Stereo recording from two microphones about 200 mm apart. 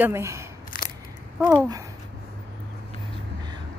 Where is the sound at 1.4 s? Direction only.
15° right (ahead or behind).